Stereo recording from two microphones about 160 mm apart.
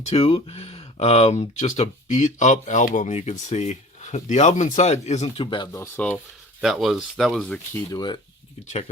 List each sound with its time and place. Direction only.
0.0 s speech: 40° left (ahead or behind)
6.0 s speech: 10° left (ahead or behind)
7.7 s speech: 25° left (ahead or behind)